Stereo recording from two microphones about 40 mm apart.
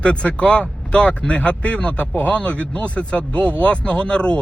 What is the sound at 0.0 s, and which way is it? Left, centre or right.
Speech, left.